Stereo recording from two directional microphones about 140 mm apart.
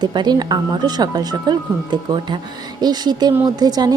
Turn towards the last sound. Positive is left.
turn(degrees=-30)  # may be behind; listen again after turning